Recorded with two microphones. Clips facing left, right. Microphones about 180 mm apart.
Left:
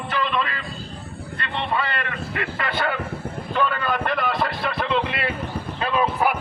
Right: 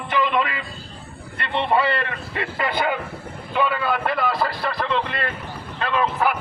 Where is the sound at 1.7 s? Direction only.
30° right (ahead or behind).